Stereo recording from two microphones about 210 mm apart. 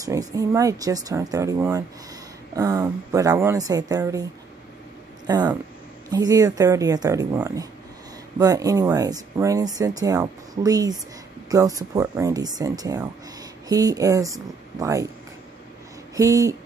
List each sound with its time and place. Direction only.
0.0 s speech: 15° right (ahead or behind)
16.2 s speech: 15° right (ahead or behind)